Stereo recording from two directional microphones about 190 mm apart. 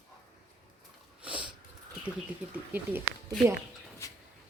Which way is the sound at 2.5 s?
10° right (ahead or behind).